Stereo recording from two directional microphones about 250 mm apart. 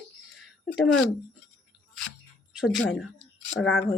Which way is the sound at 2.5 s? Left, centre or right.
Centre.